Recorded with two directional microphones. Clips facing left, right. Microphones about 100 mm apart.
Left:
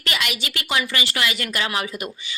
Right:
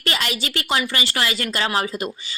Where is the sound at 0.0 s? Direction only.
35° right (ahead or behind).